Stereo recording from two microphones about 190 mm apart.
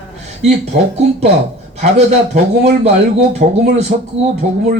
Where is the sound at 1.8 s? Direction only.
35° right (ahead or behind).